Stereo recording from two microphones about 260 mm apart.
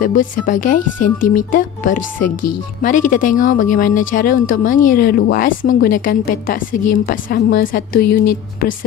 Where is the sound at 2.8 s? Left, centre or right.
Left.